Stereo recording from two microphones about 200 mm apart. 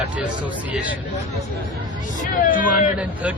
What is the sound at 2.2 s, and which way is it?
Speech, 40° left (ahead or behind).